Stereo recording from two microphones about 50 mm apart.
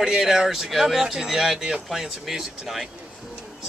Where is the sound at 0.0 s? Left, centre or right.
Centre.